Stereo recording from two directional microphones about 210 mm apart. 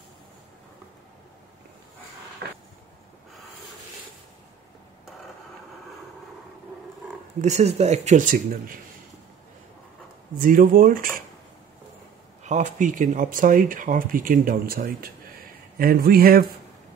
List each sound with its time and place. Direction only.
7.4 s speech: 30° right (ahead or behind)
10.4 s speech: 40° right (ahead or behind)
12.4 s speech: 35° right (ahead or behind)